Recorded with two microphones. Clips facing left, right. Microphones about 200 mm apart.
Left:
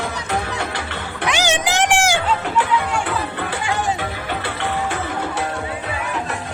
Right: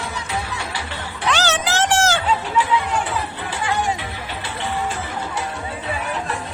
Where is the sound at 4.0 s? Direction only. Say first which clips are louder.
Left 5 dB; 60° left (ahead or behind).